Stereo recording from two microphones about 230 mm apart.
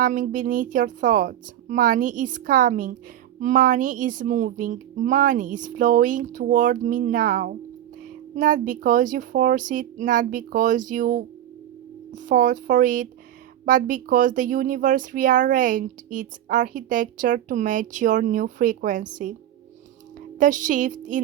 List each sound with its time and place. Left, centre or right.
0.0 s speech: right
20.4 s speech: right